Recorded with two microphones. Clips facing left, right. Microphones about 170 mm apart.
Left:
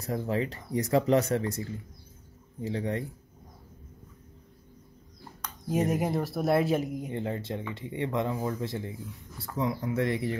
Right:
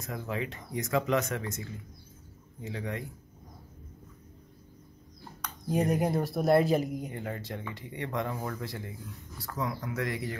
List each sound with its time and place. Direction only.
0.0 s speech: 35° left (ahead or behind)
5.4 s speech: centre (ahead or behind)
7.1 s speech: 25° left (ahead or behind)